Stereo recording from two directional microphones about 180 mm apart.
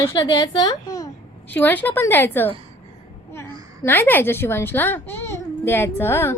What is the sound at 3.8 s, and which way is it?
A child's voice, 10° left (ahead or behind).